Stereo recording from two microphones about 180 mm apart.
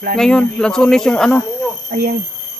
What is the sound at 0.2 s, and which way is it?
Speech, 5° left (ahead or behind).